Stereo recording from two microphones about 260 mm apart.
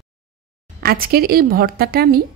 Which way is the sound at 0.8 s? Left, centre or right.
Right.